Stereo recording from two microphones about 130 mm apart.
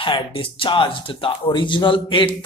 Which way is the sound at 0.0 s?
40° left (ahead or behind).